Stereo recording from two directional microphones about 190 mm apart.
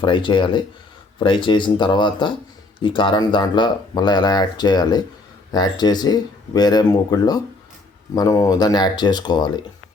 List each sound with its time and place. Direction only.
0.0 s speech: 25° left (ahead or behind)